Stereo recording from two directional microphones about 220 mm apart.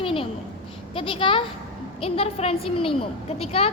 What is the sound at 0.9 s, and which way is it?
A woman's voice, 25° left (ahead or behind).